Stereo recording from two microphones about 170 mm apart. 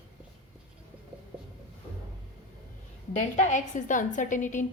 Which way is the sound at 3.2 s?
45° left (ahead or behind).